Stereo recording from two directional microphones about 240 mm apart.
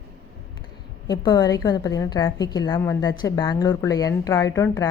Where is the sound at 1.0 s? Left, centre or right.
Centre.